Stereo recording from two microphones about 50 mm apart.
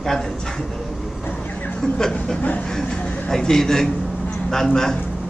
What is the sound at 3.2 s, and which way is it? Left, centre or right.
A man's voice, centre.